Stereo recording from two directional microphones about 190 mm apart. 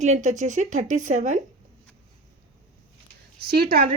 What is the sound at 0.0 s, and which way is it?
Speech, 40° right (ahead or behind).